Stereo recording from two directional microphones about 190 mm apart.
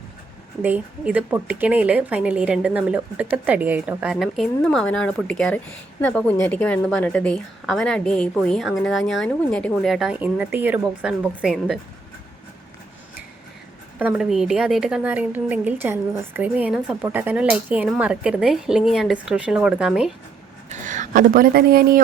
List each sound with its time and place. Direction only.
0.6 s a woman's voice: 10° right (ahead or behind)
14.0 s a woman's voice: 5° right (ahead or behind)
20.7 s a woman's voice: 40° right (ahead or behind)